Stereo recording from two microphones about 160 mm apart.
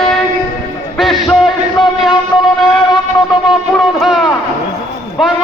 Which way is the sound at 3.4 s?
Centre (ahead or behind).